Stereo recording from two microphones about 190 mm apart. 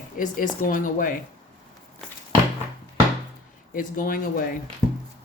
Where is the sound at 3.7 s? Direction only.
50° left (ahead or behind).